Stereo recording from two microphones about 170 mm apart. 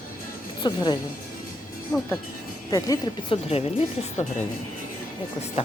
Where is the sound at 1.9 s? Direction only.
10° left (ahead or behind).